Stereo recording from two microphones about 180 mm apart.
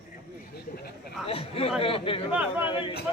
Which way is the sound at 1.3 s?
30° left (ahead or behind).